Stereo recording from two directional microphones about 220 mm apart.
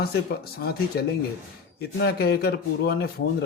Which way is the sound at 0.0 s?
45° left (ahead or behind).